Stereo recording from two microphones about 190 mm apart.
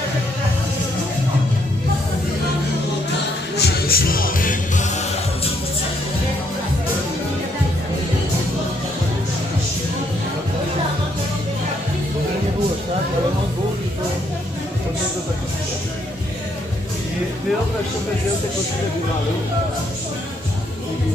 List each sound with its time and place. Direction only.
3.5 s music: 55° left (ahead or behind)